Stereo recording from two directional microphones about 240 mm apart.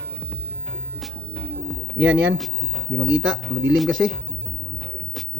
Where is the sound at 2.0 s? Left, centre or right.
Centre.